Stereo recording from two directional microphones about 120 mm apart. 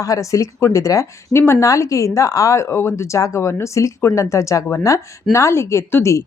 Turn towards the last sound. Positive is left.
turn(degrees=25)  # may be behind; listen again after turning